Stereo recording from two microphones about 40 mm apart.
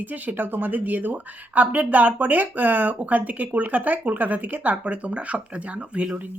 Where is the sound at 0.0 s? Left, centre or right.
Right.